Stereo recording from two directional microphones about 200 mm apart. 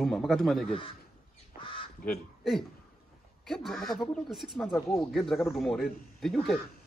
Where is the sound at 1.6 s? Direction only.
25° left (ahead or behind).